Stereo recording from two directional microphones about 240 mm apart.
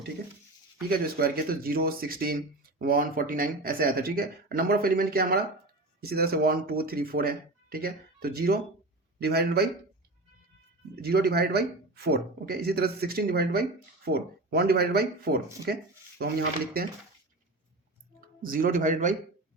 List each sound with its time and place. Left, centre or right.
0.9 s speech: right
10.9 s speech: right
15.6 s a sound: right
18.4 s speech: right